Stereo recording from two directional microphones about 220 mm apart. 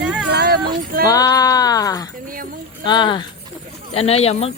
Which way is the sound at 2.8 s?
20° left (ahead or behind).